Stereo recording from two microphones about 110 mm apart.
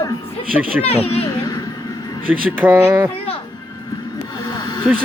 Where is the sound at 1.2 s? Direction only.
35° left (ahead or behind).